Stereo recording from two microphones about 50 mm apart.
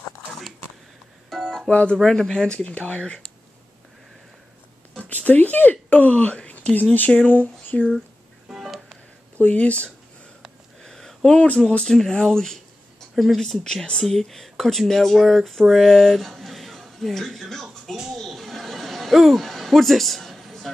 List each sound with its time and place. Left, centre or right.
1.3 s music: centre
1.7 s speech: left
2.0 s speech: centre
5.1 s speech: left
8.5 s music: centre
9.4 s speech: left
10.8 s a sound: centre
11.3 s speech: left
11.8 s speech: centre
13.1 s speech: centre
13.4 s speech: centre
18.1 s chuckle: centre